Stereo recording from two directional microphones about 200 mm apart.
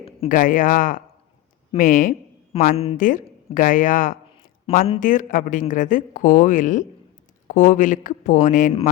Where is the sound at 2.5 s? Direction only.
30° left (ahead or behind).